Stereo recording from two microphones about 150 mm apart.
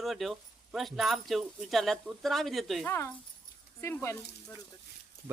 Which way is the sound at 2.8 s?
15° left (ahead or behind).